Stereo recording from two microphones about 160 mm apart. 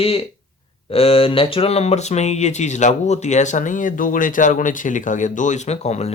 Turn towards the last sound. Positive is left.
turn(degrees=45)  # may be behind; listen again after turning